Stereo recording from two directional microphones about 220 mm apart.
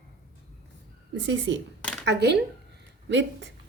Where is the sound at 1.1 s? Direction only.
55° right (ahead or behind).